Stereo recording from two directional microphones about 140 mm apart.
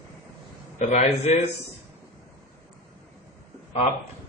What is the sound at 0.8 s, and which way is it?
Speech, 55° left (ahead or behind).